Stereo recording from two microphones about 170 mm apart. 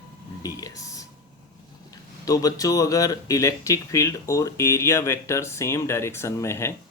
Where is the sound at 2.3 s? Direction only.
20° left (ahead or behind).